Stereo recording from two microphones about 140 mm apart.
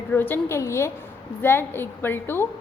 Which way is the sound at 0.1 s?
15° left (ahead or behind).